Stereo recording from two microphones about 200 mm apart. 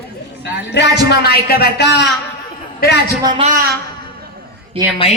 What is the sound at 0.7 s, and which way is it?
Speech, 60° left (ahead or behind).